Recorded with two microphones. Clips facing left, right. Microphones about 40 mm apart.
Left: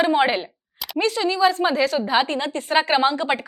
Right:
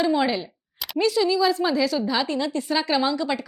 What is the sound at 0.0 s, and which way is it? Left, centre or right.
A woman's voice, left.